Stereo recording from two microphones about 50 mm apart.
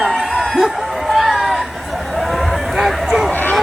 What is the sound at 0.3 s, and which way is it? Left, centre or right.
Chicken, centre.